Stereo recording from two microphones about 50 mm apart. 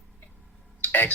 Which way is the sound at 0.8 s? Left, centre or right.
Left.